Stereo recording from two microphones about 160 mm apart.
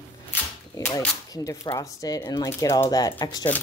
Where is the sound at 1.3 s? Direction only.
20° left (ahead or behind).